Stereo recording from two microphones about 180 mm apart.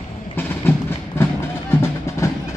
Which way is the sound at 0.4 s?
10° left (ahead or behind).